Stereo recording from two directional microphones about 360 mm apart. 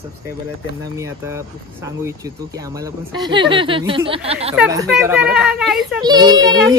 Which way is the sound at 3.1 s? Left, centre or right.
Centre.